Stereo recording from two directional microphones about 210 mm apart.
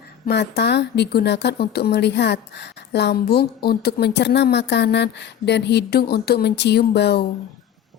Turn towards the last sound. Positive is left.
turn(degrees=50)  # may be behind; listen again after turning